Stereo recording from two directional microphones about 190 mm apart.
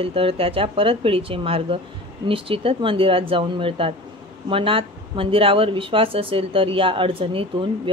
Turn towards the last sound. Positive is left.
turn(degrees=-30)  # may be behind; listen again after turning